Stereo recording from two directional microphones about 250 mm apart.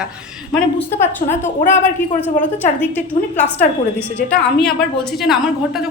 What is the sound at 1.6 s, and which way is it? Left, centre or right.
Speech, left.